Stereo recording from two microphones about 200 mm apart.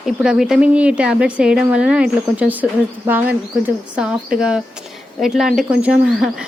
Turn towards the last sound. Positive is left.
turn(degrees=-5)  # may be behind; listen again after turning